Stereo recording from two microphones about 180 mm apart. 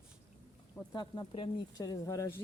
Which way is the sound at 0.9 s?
25° left (ahead or behind).